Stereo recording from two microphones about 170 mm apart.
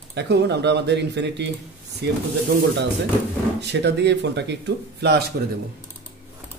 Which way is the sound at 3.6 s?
90° right.